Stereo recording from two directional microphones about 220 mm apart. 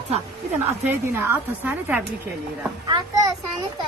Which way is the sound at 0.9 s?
10° right (ahead or behind).